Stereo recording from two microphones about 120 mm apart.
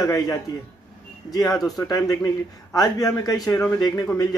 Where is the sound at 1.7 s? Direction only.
30° left (ahead or behind).